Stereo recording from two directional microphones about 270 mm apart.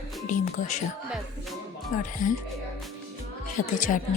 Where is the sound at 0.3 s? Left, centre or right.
Left.